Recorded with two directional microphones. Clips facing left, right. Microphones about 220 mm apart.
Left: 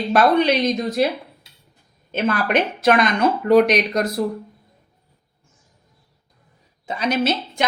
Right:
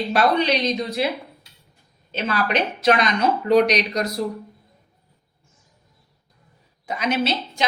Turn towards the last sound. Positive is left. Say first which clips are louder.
# left 1 dB
turn(degrees=30)  # may be behind; listen again after turning